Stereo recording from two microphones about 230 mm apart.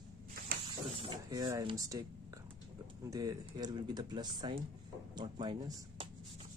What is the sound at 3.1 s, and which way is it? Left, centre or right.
Speech, centre.